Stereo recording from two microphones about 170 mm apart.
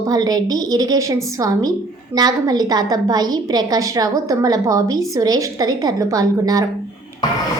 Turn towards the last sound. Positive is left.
turn(degrees=-20)  # may be behind; listen again after turning